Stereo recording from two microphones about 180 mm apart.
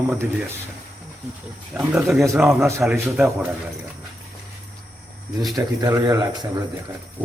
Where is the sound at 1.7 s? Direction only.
5° right (ahead or behind).